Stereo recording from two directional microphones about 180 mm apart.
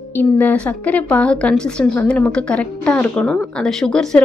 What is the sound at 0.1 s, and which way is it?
A woman's voice, 10° left (ahead or behind).